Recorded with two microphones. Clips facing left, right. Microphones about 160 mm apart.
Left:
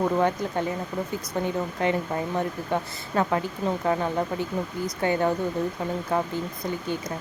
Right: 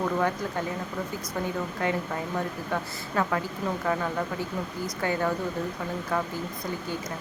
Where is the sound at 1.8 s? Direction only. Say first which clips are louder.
Left 4 dB; 20° left (ahead or behind).